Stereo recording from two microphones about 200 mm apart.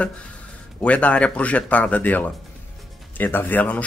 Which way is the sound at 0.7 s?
5° left (ahead or behind).